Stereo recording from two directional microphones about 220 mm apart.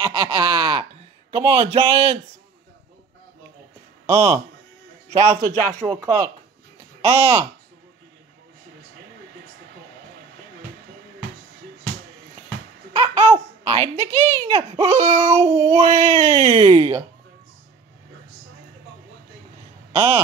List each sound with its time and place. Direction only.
0.0 s a sound: 20° right (ahead or behind)
1.3 s speech: 25° right (ahead or behind)
4.0 s a sound: 15° right (ahead or behind)
5.1 s speech: 30° right (ahead or behind)
5.6 s a woman's voice: 10° left (ahead or behind)
7.0 s speech: 25° right (ahead or behind)
12.9 s babbling: 25° right (ahead or behind)
13.7 s a woman's voice: 10° left (ahead or behind)
14.4 s speech: 30° right (ahead or behind)
19.9 s speech: 25° right (ahead or behind)